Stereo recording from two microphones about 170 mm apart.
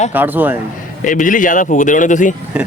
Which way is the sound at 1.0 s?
50° left (ahead or behind).